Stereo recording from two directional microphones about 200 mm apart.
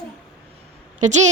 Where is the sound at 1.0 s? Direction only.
35° right (ahead or behind).